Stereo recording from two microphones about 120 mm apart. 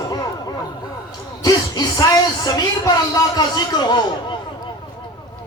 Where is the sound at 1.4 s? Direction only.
30° left (ahead or behind).